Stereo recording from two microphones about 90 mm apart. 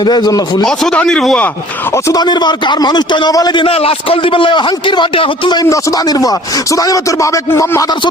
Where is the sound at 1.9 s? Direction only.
35° left (ahead or behind).